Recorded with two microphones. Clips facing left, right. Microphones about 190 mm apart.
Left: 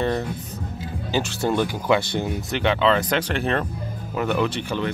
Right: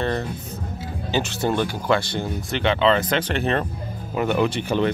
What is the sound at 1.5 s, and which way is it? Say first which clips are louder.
Speech: left 1 dB; 10° left (ahead or behind).